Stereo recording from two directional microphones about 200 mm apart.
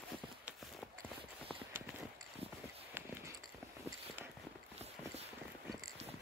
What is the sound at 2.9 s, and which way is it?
Clip-clop, 10° right (ahead or behind).